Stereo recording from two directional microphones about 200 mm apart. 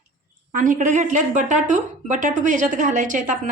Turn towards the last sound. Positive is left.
turn(degrees=-40)  # may be behind; listen again after turning